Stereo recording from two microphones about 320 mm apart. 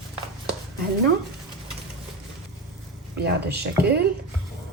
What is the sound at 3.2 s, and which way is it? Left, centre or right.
Speech, right.